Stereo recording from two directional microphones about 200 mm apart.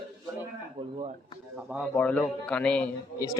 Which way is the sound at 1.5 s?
5° right (ahead or behind).